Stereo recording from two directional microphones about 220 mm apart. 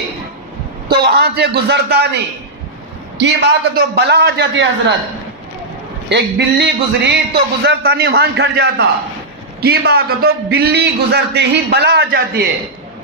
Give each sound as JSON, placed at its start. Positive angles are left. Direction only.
{"t": 0.8, "sound": "a man's voice", "side_deg": -45}
{"t": 6.0, "sound": "a man's voice", "side_deg": -50}